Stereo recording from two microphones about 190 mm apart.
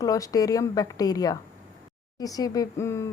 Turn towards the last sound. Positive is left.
turn(degrees=15)  # may be behind; listen again after turning